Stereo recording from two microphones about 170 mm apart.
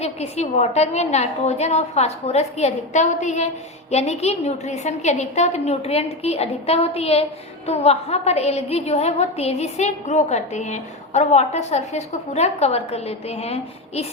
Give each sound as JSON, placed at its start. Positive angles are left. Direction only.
{"t": 0.0, "sound": "a woman's voice", "side_deg": 40}